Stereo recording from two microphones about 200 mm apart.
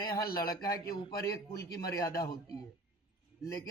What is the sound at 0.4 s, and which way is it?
Speech, 50° left (ahead or behind).